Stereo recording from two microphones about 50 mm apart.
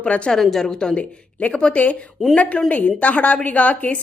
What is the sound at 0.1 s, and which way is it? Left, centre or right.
Speech, left.